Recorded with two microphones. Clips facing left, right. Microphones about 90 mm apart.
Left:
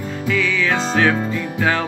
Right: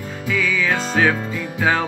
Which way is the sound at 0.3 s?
10° right (ahead or behind).